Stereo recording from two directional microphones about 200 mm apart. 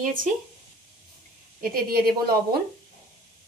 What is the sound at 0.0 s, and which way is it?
Speech, 40° right (ahead or behind).